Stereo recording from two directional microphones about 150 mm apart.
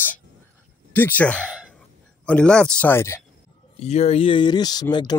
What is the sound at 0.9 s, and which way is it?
Speech, 10° left (ahead or behind).